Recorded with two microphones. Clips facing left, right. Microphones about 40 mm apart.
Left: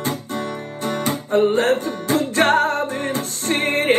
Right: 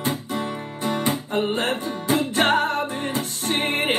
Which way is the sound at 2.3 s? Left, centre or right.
Left.